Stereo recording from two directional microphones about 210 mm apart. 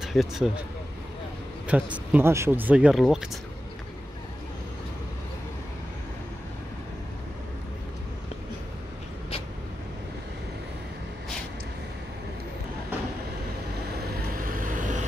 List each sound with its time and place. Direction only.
0.0 s speech: centre (ahead or behind)
1.7 s speech: 5° right (ahead or behind)
14.4 s vehicle: 40° right (ahead or behind)